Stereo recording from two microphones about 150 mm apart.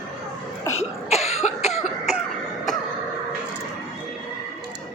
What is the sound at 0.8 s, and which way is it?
Cough, 45° left (ahead or behind).